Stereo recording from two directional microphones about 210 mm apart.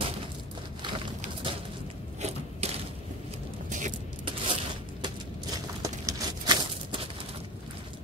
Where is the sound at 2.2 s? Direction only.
30° right (ahead or behind).